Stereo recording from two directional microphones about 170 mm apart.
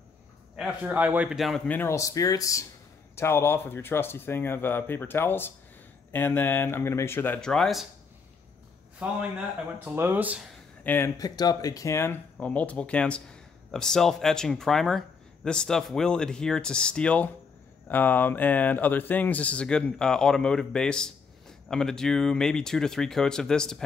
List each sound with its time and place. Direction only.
0.6 s speech: 5° right (ahead or behind)
1.8 s speech: 15° left (ahead or behind)
9.9 s speech: 10° right (ahead or behind)
10.8 s speech: 10° left (ahead or behind)
11.1 s speech: 25° left (ahead or behind); by 23.8 s 5° left (ahead or behind)